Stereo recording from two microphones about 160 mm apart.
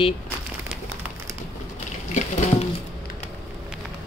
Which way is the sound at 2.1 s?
50° left (ahead or behind).